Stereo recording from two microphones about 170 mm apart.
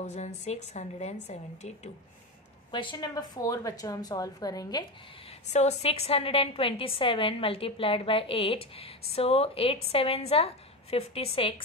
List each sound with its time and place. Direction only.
0.0 s a woman's voice: 40° left (ahead or behind)
2.7 s a woman's voice: 30° left (ahead or behind)
5.5 s a woman's voice: 40° left (ahead or behind)